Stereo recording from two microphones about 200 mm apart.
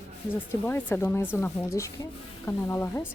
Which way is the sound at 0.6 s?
10° left (ahead or behind).